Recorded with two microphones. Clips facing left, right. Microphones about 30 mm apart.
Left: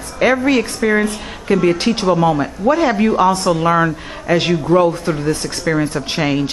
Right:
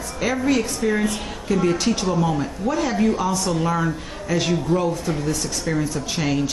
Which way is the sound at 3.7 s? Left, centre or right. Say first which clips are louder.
Left 7 dB; left.